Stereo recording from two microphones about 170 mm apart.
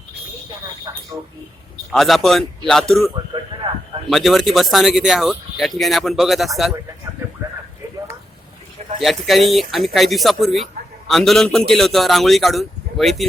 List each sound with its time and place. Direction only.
0.9 s telephone: 25° right (ahead or behind)
1.9 s speech: centre (ahead or behind)
4.1 s speech: centre (ahead or behind)
9.0 s speech: centre (ahead or behind)